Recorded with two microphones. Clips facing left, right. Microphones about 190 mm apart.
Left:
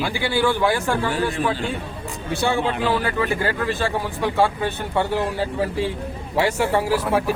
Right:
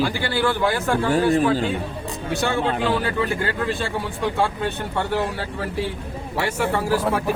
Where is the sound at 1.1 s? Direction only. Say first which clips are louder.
Right 5 dB; 40° right (ahead or behind).